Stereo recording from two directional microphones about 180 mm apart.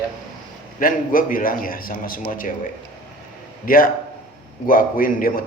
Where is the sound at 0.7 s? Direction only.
50° left (ahead or behind).